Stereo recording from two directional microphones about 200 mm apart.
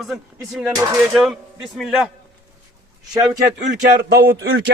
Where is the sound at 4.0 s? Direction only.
50° right (ahead or behind).